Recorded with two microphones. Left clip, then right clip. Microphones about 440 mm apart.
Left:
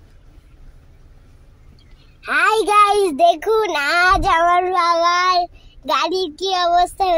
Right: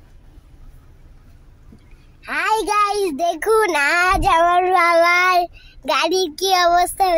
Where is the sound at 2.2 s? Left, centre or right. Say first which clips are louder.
Left 4 dB; right.